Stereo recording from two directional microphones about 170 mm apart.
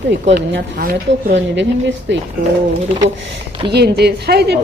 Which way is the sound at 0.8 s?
75° right (ahead or behind).